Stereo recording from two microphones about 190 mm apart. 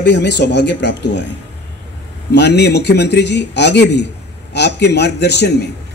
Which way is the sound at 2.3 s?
60° left (ahead or behind).